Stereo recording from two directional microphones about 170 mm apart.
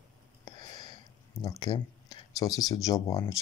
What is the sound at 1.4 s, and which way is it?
Speech, 20° left (ahead or behind).